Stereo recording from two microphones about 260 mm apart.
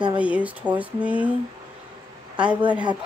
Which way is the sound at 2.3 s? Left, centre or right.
Centre.